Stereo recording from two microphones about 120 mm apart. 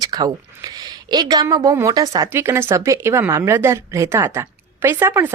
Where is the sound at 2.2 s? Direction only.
20° right (ahead or behind).